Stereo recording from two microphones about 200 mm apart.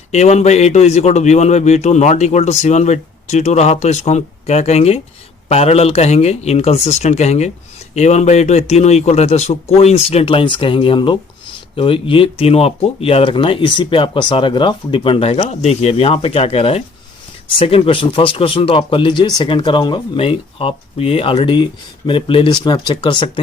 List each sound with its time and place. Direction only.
0.1 s speech: 35° left (ahead or behind)